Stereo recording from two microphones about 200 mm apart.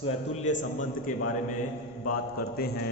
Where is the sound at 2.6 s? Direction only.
50° left (ahead or behind).